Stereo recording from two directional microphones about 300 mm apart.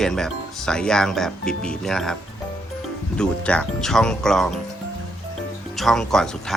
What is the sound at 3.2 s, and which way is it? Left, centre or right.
Speech, centre.